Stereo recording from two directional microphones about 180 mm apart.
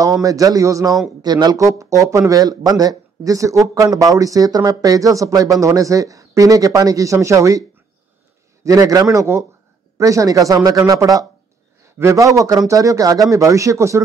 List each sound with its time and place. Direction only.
0.0 s speech: 20° right (ahead or behind)
8.6 s a man's voice: 20° right (ahead or behind)